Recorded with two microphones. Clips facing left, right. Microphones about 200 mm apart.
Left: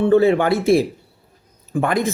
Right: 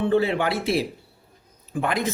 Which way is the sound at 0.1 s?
45° left (ahead or behind).